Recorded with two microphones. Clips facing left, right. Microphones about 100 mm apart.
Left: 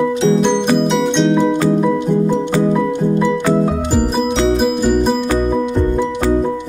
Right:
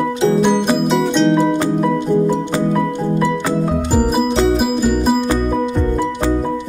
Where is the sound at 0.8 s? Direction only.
Centre (ahead or behind).